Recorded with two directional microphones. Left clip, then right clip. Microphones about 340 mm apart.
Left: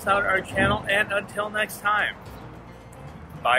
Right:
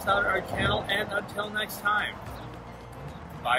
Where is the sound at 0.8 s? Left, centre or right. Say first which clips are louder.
Left 6 dB; right.